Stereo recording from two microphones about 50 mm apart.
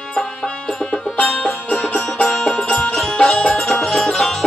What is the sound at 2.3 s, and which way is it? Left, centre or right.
Music, centre.